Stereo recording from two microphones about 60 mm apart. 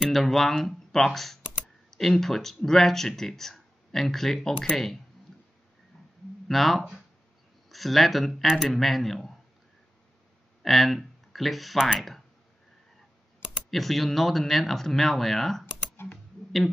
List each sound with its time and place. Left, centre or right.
0.0 s speech: centre
5.9 s a sound: centre
6.4 s speech: centre
10.6 s speech: centre
13.7 s speech: centre
15.6 s computer keyboard: left